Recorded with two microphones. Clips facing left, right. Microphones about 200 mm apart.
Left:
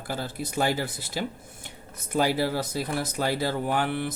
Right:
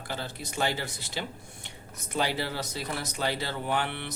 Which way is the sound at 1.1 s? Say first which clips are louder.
Left 5 dB; 50° left (ahead or behind).